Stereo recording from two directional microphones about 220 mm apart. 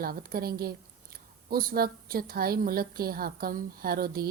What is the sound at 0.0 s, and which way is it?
A woman's voice, 40° right (ahead or behind).